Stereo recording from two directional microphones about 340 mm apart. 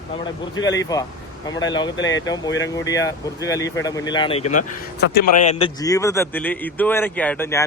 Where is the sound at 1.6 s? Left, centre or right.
Centre.